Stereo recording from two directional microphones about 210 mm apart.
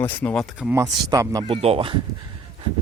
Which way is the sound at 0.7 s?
15° right (ahead or behind).